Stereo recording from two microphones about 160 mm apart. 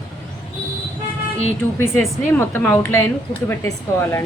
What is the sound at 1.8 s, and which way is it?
Speech, 15° left (ahead or behind).